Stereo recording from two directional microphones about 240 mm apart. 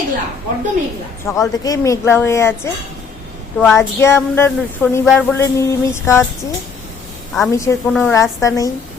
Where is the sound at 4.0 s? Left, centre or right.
Centre.